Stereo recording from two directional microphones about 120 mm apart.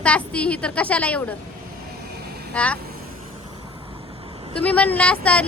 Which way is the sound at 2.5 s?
10° left (ahead or behind).